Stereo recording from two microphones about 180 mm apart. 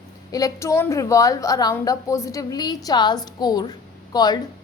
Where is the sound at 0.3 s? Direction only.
20° left (ahead or behind).